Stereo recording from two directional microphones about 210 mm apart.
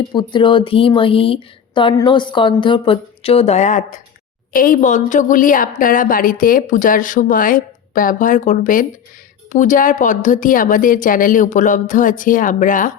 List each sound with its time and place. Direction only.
0.1 s a woman's voice: 20° left (ahead or behind); by 12.9 s 40° left (ahead or behind)